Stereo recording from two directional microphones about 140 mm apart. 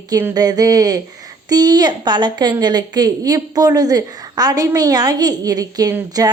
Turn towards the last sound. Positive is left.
turn(degrees=-25)  # may be behind; listen again after turning